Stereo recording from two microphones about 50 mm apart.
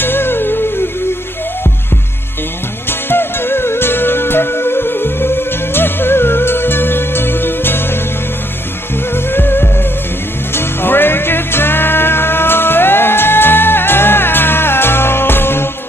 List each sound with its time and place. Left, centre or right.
0.0 s music: left
2.9 s music: left
9.1 s music: left